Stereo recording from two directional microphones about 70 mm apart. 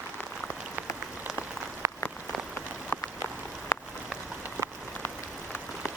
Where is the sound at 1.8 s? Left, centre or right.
Right.